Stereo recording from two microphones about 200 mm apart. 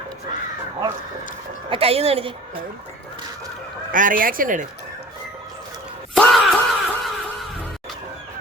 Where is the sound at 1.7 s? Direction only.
30° right (ahead or behind).